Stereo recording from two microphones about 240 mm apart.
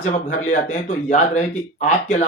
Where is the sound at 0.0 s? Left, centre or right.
Left.